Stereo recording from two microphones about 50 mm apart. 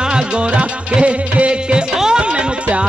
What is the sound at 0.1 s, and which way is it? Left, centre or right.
Music, right.